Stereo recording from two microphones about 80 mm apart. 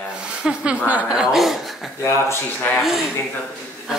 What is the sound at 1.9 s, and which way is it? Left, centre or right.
Speech, left.